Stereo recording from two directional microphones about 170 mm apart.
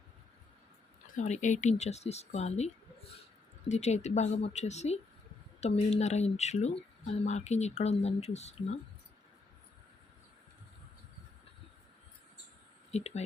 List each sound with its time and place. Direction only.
1.0 s speech: 45° left (ahead or behind)
3.7 s speech: 40° left (ahead or behind)
12.9 s speech: 40° left (ahead or behind)